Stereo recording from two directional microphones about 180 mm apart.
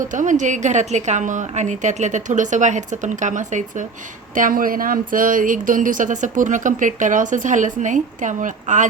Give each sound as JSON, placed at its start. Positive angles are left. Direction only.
{"t": 0.0, "sound": "speech", "side_deg": -45}